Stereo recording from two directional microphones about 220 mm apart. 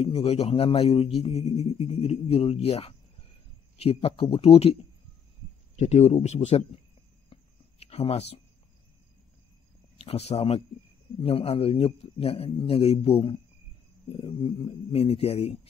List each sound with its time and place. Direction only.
0.0 s speech: 25° left (ahead or behind)
5.8 s speech: 30° left (ahead or behind)
7.3 s a sound: 25° left (ahead or behind)
7.8 s speech: 25° left (ahead or behind)
9.9 s speech: 25° left (ahead or behind)